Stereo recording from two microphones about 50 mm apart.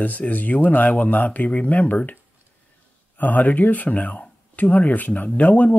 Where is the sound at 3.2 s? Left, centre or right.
Left.